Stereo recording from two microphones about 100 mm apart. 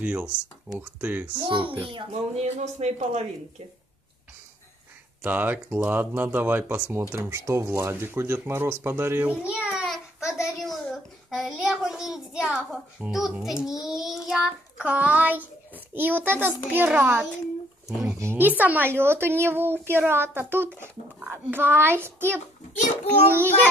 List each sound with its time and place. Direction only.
0.0 s speech: 15° right (ahead or behind)
1.4 s a child's voice: 55° right (ahead or behind); by 3.6 s 90° right
5.2 s a child's voice: 20° right (ahead or behind)
18.0 s speech: 30° right (ahead or behind)
18.4 s speech: 15° right (ahead or behind)